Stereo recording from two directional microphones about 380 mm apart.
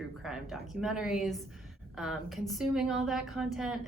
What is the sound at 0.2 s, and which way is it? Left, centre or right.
A woman's voice, centre.